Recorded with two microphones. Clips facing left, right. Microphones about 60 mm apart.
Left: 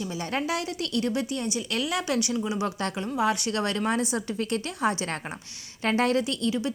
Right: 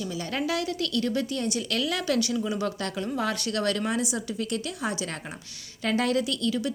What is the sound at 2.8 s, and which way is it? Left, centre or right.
Speech, left.